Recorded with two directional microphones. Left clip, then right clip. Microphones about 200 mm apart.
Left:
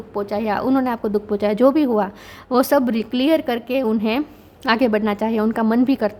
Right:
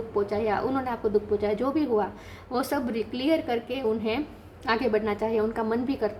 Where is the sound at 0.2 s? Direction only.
45° left (ahead or behind).